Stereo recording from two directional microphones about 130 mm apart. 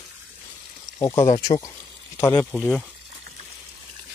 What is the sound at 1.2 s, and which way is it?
Speech, 40° left (ahead or behind).